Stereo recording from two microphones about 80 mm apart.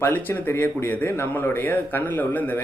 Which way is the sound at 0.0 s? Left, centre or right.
Left.